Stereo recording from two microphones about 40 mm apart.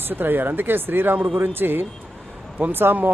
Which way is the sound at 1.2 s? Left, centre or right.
Right.